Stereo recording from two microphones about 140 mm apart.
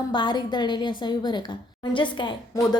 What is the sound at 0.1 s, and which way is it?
A woman's voice, 35° left (ahead or behind).